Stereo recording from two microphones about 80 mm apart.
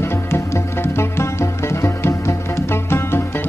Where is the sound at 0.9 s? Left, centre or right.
Left.